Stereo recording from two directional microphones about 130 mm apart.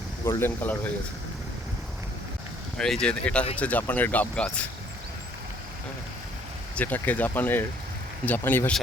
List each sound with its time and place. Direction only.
0.3 s speech: 20° left (ahead or behind)
2.7 s speech: 5° left (ahead or behind)
6.7 s speech: 15° left (ahead or behind)